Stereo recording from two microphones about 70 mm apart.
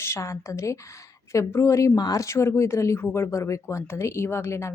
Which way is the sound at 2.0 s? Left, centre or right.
Left.